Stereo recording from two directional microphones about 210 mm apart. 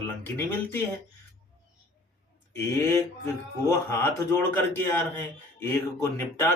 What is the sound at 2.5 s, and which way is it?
Speech, 10° left (ahead or behind).